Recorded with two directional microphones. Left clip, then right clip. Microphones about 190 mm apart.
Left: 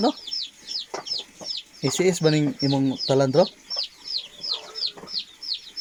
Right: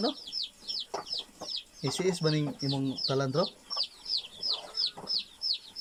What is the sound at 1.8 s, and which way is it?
Speech, 15° left (ahead or behind).